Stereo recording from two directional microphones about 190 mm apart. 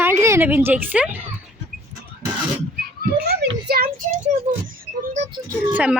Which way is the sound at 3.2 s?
55° right (ahead or behind).